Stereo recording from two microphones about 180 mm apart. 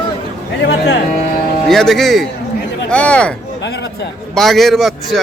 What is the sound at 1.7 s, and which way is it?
A man's voice, centre (ahead or behind).